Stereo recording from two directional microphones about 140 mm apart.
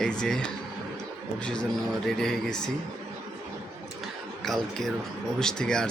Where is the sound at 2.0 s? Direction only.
Centre (ahead or behind).